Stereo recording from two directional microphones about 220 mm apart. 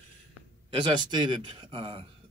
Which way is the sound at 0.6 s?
20° right (ahead or behind).